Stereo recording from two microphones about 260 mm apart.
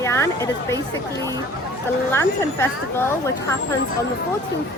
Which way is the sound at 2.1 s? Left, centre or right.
Centre.